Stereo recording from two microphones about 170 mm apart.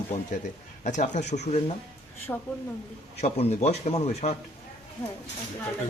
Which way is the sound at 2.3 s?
10° left (ahead or behind).